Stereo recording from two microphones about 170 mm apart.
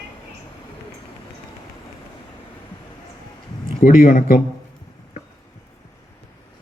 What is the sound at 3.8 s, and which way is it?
Speech, 50° left (ahead or behind).